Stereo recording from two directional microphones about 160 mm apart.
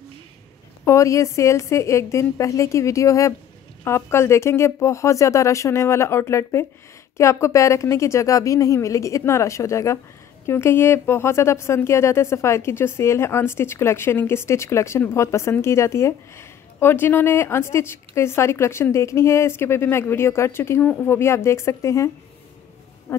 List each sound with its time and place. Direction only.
0.8 s a woman's voice: 20° left (ahead or behind)